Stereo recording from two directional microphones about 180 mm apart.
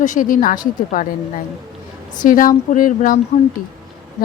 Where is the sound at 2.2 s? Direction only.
50° left (ahead or behind).